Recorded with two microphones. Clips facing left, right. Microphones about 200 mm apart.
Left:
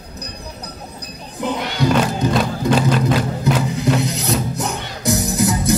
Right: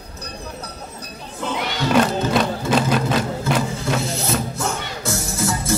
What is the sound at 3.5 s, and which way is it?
Music, 20° left (ahead or behind).